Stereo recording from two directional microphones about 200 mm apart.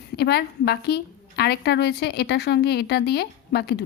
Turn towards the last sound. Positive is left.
turn(degrees=55)  # may be behind; listen again after turning